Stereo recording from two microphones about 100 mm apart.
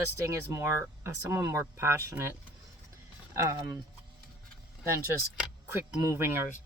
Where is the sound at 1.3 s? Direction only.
35° right (ahead or behind).